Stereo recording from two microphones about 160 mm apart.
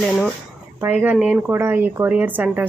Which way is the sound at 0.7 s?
10° right (ahead or behind).